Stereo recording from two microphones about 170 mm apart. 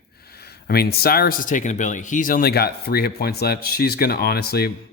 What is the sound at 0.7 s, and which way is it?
Speech, 65° left (ahead or behind).